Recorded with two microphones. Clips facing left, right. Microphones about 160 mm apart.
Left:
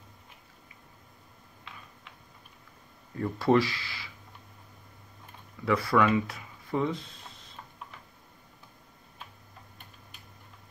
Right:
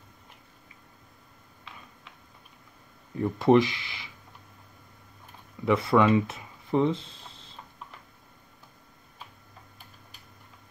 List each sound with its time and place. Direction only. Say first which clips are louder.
3.2 s speech: right 4 dB; 20° right (ahead or behind)
5.7 s speech: right 3 dB; 20° right (ahead or behind)